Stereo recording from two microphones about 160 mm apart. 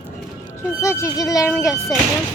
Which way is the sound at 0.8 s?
20° left (ahead or behind).